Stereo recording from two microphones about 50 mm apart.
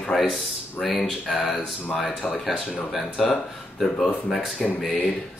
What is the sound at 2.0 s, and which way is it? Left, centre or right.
Speech, left.